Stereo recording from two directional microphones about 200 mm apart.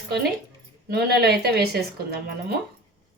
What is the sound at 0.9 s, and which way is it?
Speech, 55° right (ahead or behind).